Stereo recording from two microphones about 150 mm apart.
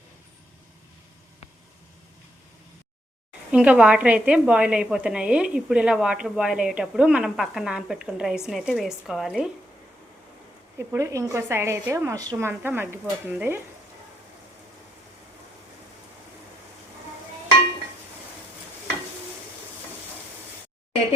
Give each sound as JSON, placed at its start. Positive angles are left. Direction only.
{"t": 3.5, "sound": "a woman's voice", "side_deg": -5}
{"t": 10.8, "sound": "a woman's voice", "side_deg": -20}